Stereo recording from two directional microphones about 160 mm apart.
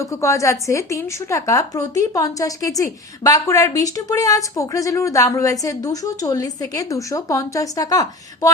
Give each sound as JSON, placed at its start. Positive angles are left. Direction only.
{"t": 0.0, "sound": "speech", "side_deg": 20}